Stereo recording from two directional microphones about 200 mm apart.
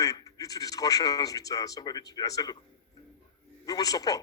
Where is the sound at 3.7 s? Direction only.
20° left (ahead or behind).